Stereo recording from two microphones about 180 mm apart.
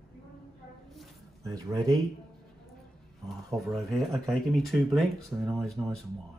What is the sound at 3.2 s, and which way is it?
Speech, centre (ahead or behind).